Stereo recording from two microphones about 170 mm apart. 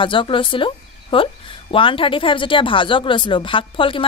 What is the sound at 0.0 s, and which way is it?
A woman's voice, 30° left (ahead or behind).